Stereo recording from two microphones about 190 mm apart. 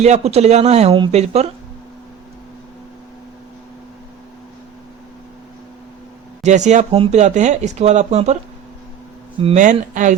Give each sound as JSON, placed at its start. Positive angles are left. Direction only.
{"t": 0.0, "sound": "speech", "side_deg": -35}
{"t": 6.4, "sound": "speech", "side_deg": -40}
{"t": 9.4, "sound": "speech", "side_deg": -35}